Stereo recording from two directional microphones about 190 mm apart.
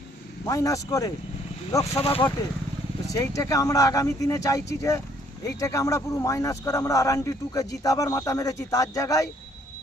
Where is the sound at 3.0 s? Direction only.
15° left (ahead or behind).